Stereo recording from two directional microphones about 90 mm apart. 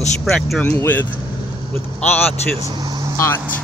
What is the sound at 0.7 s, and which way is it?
Speech, 20° left (ahead or behind).